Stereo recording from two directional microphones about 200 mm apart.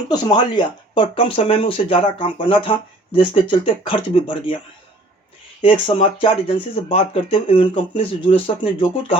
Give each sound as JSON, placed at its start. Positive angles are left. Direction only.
{"t": 0.1, "sound": "speech", "side_deg": 20}
{"t": 5.6, "sound": "speech", "side_deg": 25}